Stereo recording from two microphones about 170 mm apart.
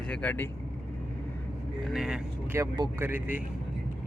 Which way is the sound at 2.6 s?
25° right (ahead or behind).